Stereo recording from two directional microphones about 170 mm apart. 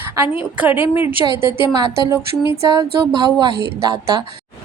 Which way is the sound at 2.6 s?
25° right (ahead or behind).